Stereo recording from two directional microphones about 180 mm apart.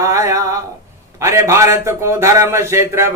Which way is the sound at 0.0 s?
15° right (ahead or behind).